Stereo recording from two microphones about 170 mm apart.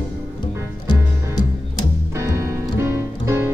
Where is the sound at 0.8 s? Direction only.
25° left (ahead or behind).